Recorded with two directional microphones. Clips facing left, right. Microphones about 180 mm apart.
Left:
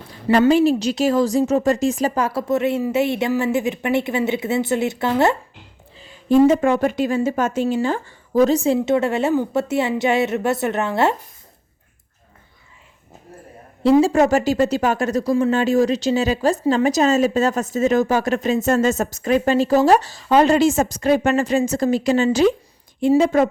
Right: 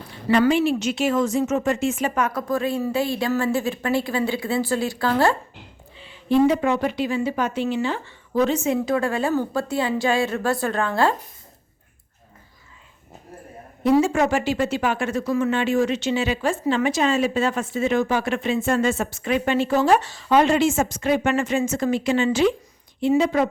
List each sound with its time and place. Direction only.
0.3 s a woman's voice: 40° left (ahead or behind); by 5.4 s 20° left (ahead or behind)
6.0 s speech: 40° left (ahead or behind); by 11.1 s 20° left (ahead or behind)
13.8 s speech: 30° left (ahead or behind); by 23.2 s 45° left (ahead or behind)